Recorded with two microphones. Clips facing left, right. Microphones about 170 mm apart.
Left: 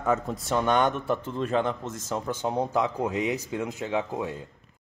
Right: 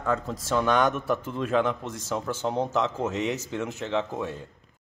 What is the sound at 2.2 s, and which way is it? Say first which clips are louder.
Speech: even; 15° left (ahead or behind).